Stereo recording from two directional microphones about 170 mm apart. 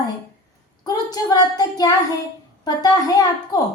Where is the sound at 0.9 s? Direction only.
25° left (ahead or behind).